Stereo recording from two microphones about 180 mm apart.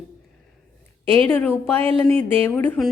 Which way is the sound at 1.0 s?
30° right (ahead or behind).